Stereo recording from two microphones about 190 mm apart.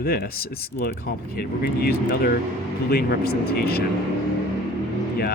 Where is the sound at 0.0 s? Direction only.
55° left (ahead or behind).